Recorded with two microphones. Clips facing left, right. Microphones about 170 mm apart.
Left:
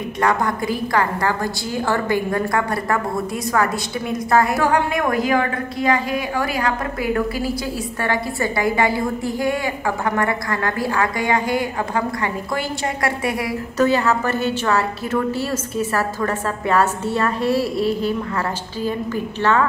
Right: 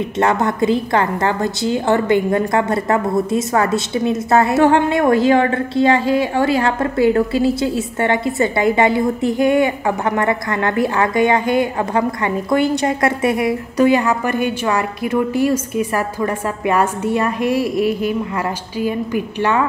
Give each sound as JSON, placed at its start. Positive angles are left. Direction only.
{"t": 0.2, "sound": "a woman's voice", "side_deg": -25}